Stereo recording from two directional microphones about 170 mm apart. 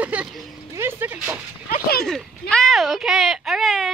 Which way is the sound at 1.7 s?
65° left (ahead or behind).